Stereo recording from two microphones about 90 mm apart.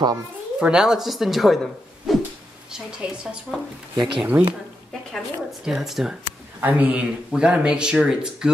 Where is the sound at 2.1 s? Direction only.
Centre (ahead or behind).